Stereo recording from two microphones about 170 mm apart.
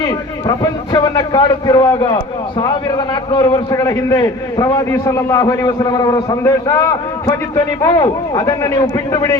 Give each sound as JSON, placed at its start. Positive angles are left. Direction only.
{"t": 1.1, "sound": "a man's voice", "side_deg": 25}
{"t": 3.3, "sound": "a man's voice", "side_deg": 25}